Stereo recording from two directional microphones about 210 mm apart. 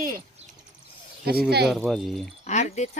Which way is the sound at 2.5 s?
35° left (ahead or behind).